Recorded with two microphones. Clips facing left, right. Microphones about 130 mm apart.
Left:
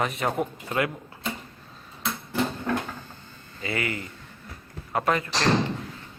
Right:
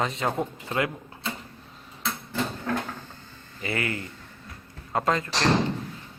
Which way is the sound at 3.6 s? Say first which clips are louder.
Even; 25° left (ahead or behind).